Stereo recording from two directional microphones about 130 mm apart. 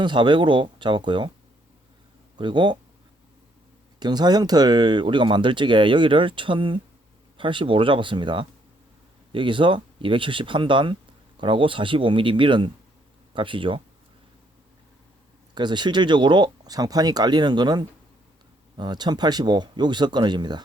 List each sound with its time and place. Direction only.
0.0 s speech: 35° right (ahead or behind)
2.4 s speech: 35° right (ahead or behind)
4.0 s speech: 30° right (ahead or behind)
15.5 s speech: 35° right (ahead or behind)